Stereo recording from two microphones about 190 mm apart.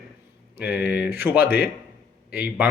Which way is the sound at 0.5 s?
10° right (ahead or behind).